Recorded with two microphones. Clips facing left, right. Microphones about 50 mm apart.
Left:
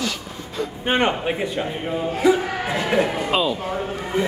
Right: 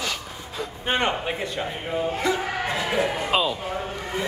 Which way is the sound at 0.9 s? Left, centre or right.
Centre.